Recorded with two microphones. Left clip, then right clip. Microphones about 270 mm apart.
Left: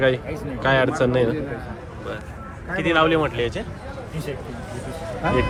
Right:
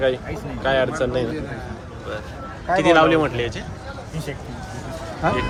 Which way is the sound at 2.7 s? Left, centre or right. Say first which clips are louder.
Right 4 dB; centre.